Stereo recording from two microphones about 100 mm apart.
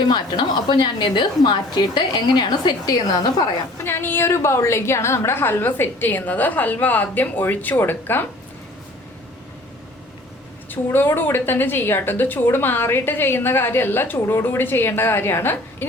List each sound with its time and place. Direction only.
0.1 s a woman's voice: 50° left (ahead or behind)
3.8 s a woman's voice: 25° left (ahead or behind)
10.7 s a woman's voice: 20° left (ahead or behind)